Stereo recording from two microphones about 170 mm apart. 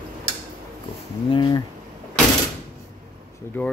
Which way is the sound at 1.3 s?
25° left (ahead or behind).